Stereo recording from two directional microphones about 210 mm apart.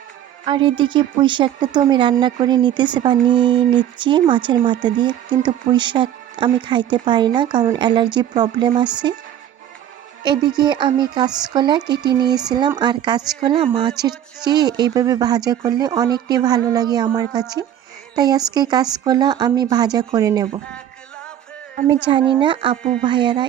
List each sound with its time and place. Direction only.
0.4 s a woman's voice: 25° right (ahead or behind)
10.3 s a woman's voice: 20° right (ahead or behind)
21.8 s a woman's voice: 25° right (ahead or behind)